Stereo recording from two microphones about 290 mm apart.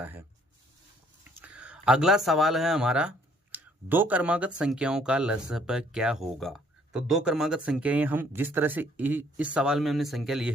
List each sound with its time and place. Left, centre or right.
0.0 s speech: centre
1.4 s speech: centre